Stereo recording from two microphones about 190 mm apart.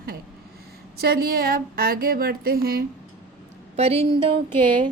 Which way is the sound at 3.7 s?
30° right (ahead or behind).